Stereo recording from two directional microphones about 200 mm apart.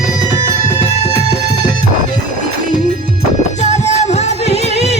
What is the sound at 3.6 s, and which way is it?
Music, 35° left (ahead or behind).